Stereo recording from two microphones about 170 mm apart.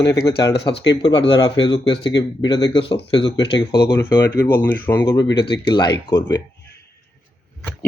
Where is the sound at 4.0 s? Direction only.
10° left (ahead or behind).